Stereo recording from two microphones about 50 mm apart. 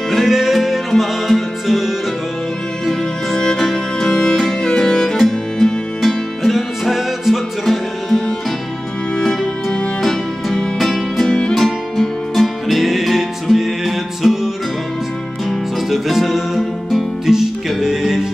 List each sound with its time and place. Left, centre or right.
0.1 s music: centre
3.3 s music: centre
10.5 s music: centre
15.9 s music: centre